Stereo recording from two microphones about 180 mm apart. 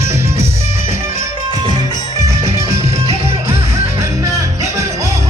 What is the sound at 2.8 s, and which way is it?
Music, 35° right (ahead or behind).